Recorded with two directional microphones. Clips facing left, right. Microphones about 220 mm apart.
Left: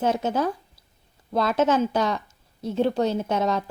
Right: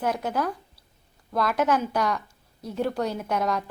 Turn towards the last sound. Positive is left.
turn(degrees=25)  # may be behind; listen again after turning